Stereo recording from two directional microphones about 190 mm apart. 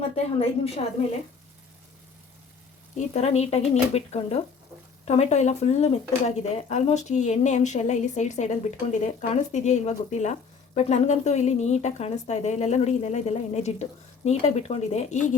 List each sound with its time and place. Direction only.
0.2 s speech: 30° left (ahead or behind)
3.1 s speech: 35° left (ahead or behind)